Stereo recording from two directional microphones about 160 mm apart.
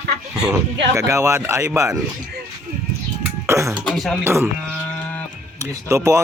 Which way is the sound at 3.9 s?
Centre (ahead or behind).